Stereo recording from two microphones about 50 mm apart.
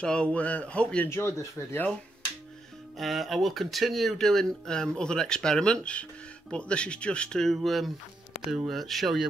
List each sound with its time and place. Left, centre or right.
0.0 s speech: centre
1.0 s speech: left
3.0 s speech: centre
7.6 s speech: centre